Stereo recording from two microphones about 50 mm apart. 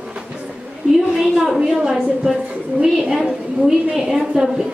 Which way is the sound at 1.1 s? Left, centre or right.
Centre.